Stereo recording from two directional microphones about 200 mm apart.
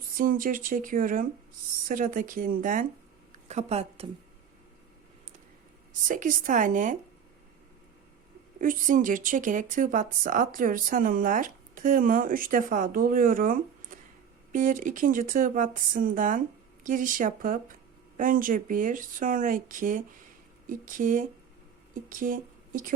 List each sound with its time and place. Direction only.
0.1 s speech: 45° right (ahead or behind)
6.1 s speech: 40° right (ahead or behind)
8.6 s speech: 40° right (ahead or behind)